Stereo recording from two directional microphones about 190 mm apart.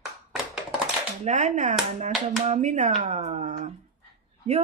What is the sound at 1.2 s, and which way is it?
Speech, 40° right (ahead or behind).